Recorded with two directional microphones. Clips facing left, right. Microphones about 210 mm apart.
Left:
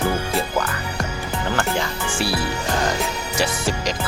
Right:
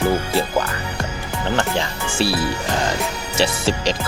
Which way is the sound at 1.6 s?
25° right (ahead or behind).